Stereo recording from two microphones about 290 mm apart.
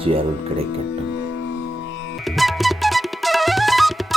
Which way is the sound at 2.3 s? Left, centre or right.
Centre.